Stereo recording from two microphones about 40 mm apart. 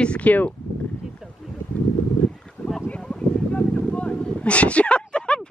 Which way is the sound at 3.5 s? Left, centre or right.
Left.